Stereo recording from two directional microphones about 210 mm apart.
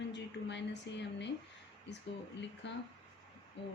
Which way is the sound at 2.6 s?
55° left (ahead or behind).